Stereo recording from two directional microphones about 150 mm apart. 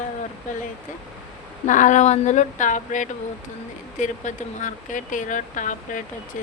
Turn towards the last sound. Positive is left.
turn(degrees=60)  # may be behind; listen again after turning